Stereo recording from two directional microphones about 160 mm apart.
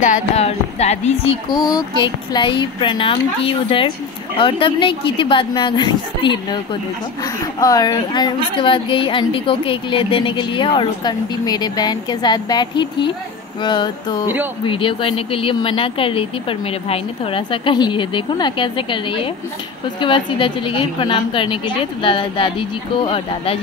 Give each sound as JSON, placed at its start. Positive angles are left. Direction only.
{"t": 0.0, "sound": "speech", "side_deg": 45}
{"t": 1.7, "sound": "a woman's voice", "side_deg": 25}
{"t": 13.6, "sound": "a sound", "side_deg": 30}
{"t": 14.6, "sound": "a woman's voice", "side_deg": 30}